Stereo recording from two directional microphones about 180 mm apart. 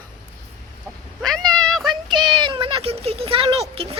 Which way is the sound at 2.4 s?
25° right (ahead or behind).